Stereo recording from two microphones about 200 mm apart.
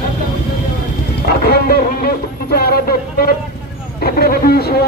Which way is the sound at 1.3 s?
50° left (ahead or behind).